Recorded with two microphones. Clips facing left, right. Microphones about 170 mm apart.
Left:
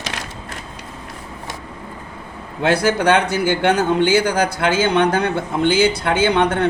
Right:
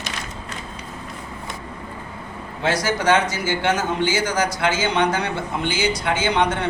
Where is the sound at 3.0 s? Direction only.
60° left (ahead or behind).